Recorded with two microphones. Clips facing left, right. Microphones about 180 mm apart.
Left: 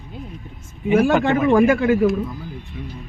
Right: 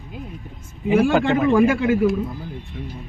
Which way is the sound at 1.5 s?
45° left (ahead or behind).